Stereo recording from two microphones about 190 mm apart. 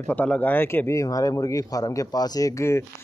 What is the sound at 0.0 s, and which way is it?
Speech, 10° left (ahead or behind).